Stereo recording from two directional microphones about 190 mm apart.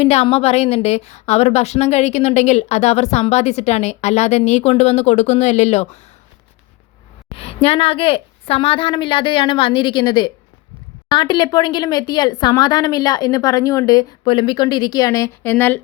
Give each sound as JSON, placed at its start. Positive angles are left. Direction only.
{"t": 0.0, "sound": "a woman's voice", "side_deg": 35}
{"t": 7.3, "sound": "a woman's voice", "side_deg": 30}